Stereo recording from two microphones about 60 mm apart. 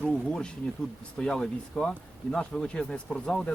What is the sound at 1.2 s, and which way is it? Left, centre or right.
Speech, centre.